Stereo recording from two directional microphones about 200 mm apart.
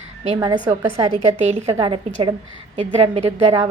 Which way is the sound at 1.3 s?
35° right (ahead or behind).